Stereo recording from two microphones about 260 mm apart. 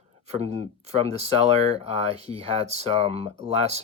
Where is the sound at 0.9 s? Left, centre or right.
Right.